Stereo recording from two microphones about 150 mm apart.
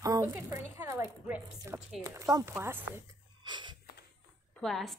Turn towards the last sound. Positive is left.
turn(degrees=0)  # may be behind; listen again after turning